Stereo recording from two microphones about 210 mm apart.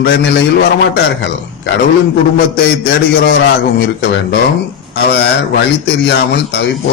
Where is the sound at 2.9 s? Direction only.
50° left (ahead or behind).